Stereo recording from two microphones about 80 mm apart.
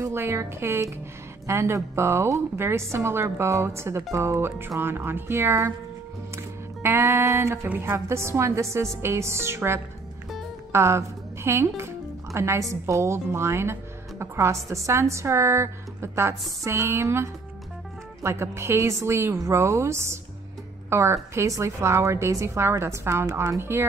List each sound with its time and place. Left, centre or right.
0.0 s a woman's voice: right